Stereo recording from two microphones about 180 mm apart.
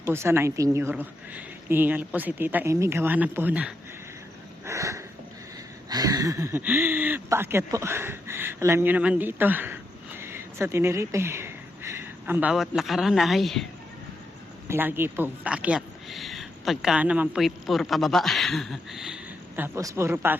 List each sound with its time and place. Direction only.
0.0 s a woman's voice: 15° right (ahead or behind)
4.6 s a sound: 15° right (ahead or behind)
5.9 s speech: 20° right (ahead or behind); by 13.7 s centre (ahead or behind)
14.7 s speech: 10° right (ahead or behind)